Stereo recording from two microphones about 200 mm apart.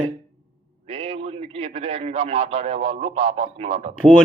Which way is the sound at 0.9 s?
30° right (ahead or behind).